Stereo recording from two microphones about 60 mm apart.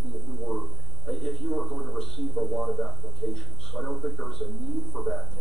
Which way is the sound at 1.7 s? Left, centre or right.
Left.